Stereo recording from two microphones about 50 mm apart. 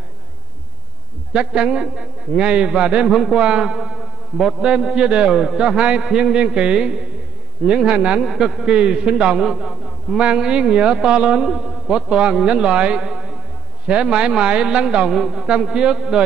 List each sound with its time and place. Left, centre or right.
1.3 s a man's voice: centre
3.1 s a man's voice: centre
3.3 s a man's voice: centre
4.6 s a man's voice: centre
8.2 s a man's voice: centre
10.1 s a man's voice: right
13.0 s a sound: centre
13.8 s speech: centre
15.0 s a man's voice: centre